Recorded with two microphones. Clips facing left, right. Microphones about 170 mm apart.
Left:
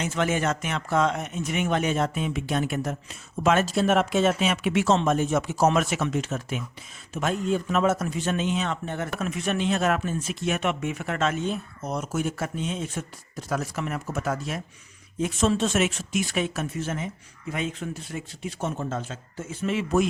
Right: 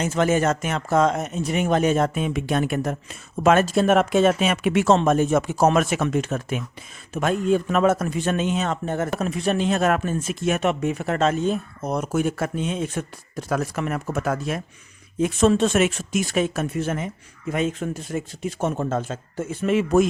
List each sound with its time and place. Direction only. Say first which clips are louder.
0.0 s a man's voice: right 5 dB; 40° right (ahead or behind)
16.7 s a man's voice: right 5 dB; 55° right (ahead or behind)